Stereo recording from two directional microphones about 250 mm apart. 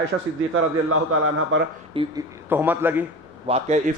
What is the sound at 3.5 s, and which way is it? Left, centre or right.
Speech, right.